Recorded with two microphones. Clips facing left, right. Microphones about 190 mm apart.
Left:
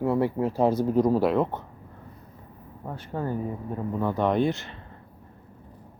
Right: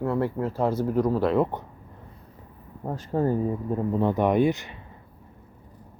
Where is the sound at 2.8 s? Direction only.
40° right (ahead or behind).